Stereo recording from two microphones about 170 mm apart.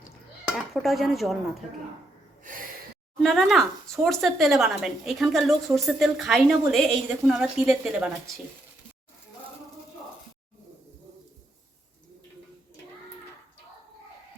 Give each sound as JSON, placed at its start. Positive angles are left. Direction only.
{"t": 0.5, "sound": "speech", "side_deg": 0}
{"t": 2.4, "sound": "gasp", "side_deg": -55}
{"t": 3.2, "sound": "a woman's voice", "side_deg": 0}